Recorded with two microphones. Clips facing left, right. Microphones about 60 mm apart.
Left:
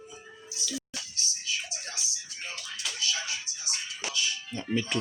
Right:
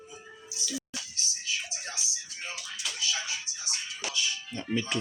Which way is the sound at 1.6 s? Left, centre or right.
Right.